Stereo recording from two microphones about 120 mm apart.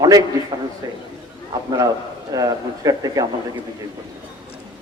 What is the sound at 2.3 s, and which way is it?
Speech, 30° right (ahead or behind).